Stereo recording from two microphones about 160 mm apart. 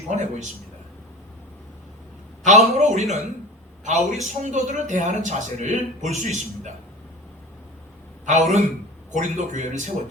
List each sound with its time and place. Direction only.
0.1 s a man's voice: 45° right (ahead or behind)
2.5 s a man's voice: 45° right (ahead or behind)
8.2 s a man's voice: 45° right (ahead or behind)